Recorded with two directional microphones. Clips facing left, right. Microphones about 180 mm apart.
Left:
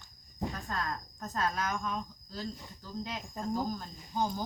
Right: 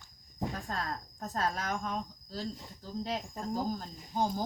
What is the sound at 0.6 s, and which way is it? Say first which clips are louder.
Cricket: left 1 dB; 35° right (ahead or behind).